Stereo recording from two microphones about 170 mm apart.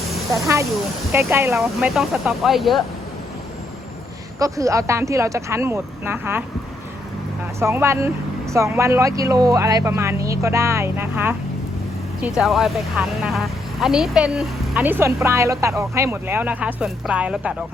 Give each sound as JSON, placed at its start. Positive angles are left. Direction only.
{"t": 1.1, "sound": "speech", "side_deg": -15}
{"t": 1.5, "sound": "speech", "side_deg": -5}
{"t": 4.4, "sound": "speech", "side_deg": -20}
{"t": 7.6, "sound": "speech", "side_deg": -15}